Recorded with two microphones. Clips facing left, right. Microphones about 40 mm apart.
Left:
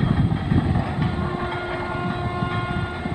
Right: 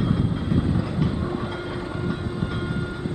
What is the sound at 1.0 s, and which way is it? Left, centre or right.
Train, left.